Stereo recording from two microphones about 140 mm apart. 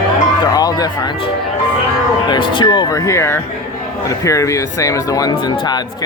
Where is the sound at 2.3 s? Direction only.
35° left (ahead or behind).